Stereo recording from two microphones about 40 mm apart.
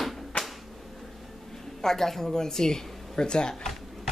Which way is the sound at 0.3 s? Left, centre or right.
Left.